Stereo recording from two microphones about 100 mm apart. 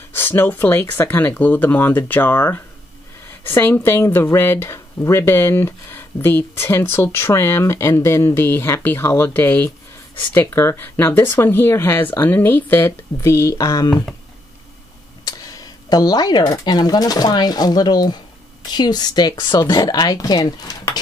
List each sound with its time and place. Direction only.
0.1 s speech: 20° left (ahead or behind); by 14.0 s 40° left (ahead or behind)
15.2 s speech: 35° left (ahead or behind)